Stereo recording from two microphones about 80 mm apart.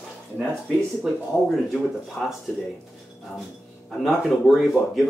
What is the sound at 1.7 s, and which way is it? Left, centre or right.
Speech, centre.